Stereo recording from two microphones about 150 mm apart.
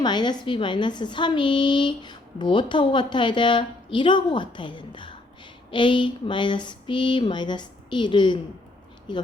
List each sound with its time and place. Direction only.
0.0 s speech: 30° left (ahead or behind)